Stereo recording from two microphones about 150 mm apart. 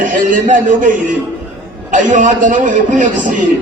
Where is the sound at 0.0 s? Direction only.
60° right (ahead or behind).